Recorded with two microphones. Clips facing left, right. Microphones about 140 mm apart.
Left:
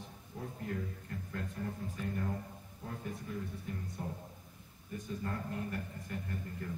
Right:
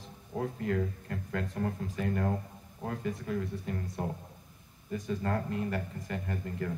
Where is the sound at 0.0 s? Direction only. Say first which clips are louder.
Right 9 dB; 90° right.